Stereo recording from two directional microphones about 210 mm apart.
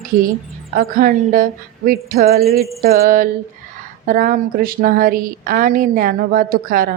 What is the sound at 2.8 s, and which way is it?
A woman's voice, 45° right (ahead or behind).